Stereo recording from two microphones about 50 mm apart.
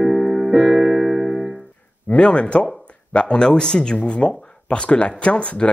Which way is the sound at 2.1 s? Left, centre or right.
Left.